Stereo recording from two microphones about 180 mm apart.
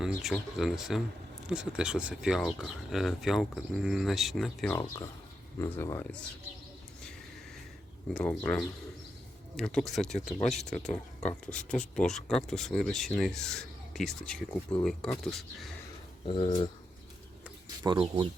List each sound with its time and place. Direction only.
0.2 s speech: centre (ahead or behind)
5.5 s speech: 15° left (ahead or behind)
8.1 s speech: 5° left (ahead or behind)
16.2 s speech: 25° left (ahead or behind)
17.8 s speech: 25° right (ahead or behind)